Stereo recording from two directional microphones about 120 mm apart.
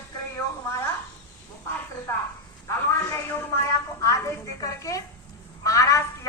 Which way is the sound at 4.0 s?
25° left (ahead or behind).